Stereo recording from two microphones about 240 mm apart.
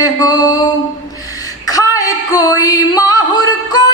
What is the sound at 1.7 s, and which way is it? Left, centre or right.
Singing, centre.